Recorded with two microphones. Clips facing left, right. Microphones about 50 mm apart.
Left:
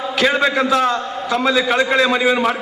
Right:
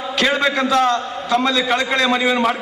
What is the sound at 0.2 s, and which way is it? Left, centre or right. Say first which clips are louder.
A man's voice: left 1 dB; centre.